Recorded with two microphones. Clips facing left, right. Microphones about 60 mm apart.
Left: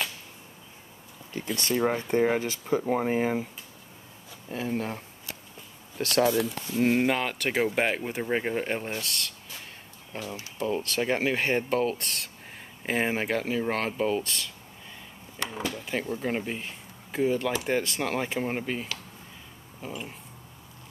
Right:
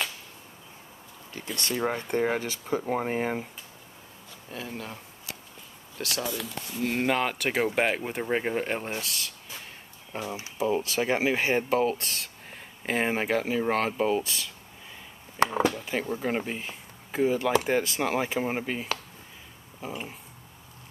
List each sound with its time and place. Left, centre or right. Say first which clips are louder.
1.3 s speech: left 3 dB; left
1.8 s speech: left 3 dB; centre
4.5 s speech: left 7 dB; left
7.0 s speech: even; centre
10.2 s speech: right 3 dB; right
10.6 s speech: right 2 dB; centre
15.3 s a sound: right 9 dB; right
15.7 s a sound: right 1 dB; centre
16.1 s speech: right 1 dB; centre